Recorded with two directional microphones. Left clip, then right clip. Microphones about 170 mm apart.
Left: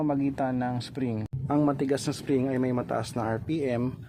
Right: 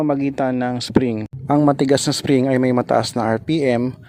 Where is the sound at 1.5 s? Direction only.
50° right (ahead or behind).